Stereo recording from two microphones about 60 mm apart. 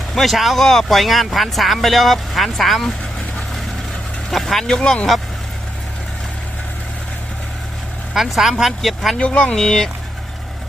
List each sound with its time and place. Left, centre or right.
0.1 s speech: centre
4.3 s speech: centre
8.1 s speech: centre
9.1 s speech: centre